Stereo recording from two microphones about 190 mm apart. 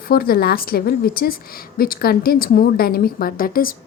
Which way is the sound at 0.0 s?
50° left (ahead or behind).